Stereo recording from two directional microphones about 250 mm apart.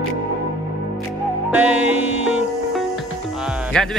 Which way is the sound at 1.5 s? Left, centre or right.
Centre.